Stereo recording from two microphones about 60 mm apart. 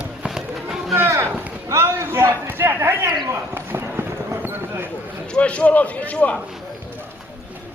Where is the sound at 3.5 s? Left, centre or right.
Right.